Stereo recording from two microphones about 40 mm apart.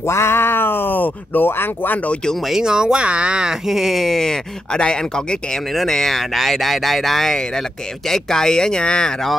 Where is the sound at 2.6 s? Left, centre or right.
Centre.